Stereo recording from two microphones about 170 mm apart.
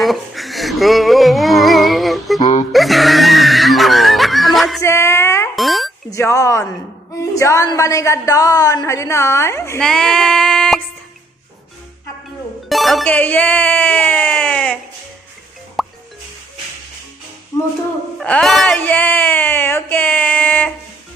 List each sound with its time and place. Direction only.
0.0 s music: centre (ahead or behind)
2.7 s a sound: centre (ahead or behind)
4.8 s music: 15° left (ahead or behind)
5.5 s a sound: centre (ahead or behind)
6.1 s speech: 15° left (ahead or behind)
9.8 s a sound: 5° left (ahead or behind)
12.6 s speech: centre (ahead or behind)
15.8 s music: centre (ahead or behind)
18.2 s speech: 5° left (ahead or behind)